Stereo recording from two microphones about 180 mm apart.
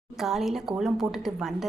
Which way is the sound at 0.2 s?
Centre (ahead or behind).